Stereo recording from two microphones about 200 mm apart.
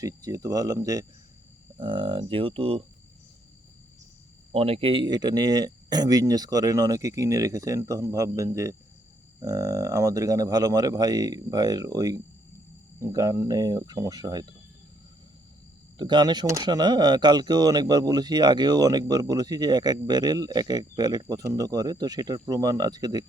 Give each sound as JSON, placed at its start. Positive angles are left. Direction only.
{"t": 0.0, "sound": "speech", "side_deg": -15}
{"t": 4.5, "sound": "speech", "side_deg": -30}
{"t": 16.0, "sound": "speech", "side_deg": -20}